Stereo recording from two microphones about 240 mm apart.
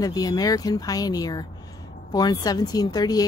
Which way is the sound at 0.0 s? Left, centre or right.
Centre.